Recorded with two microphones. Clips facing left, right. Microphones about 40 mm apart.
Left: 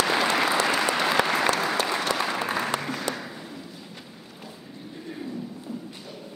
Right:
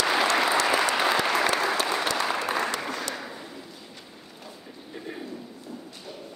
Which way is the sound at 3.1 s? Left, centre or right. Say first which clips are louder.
Left 1 dB; centre.